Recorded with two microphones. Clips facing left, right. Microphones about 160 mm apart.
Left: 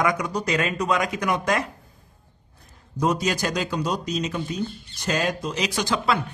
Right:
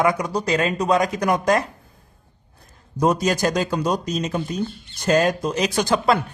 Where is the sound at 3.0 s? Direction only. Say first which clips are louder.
Right 4 dB; 45° right (ahead or behind).